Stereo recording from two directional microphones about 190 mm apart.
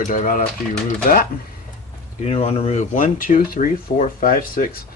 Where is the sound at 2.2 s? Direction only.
30° left (ahead or behind).